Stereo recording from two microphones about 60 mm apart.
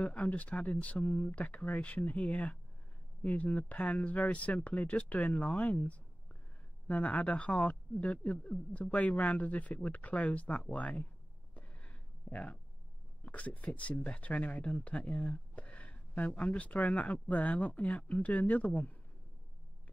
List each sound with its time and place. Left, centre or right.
0.0 s speech: left
11.5 s a sound: left
13.2 s speech: left